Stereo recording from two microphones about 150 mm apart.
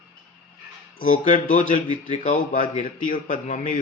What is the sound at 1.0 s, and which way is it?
A man's voice, 60° left (ahead or behind).